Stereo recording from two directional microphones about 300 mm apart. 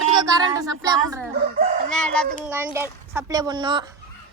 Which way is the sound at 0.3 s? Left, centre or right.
Centre.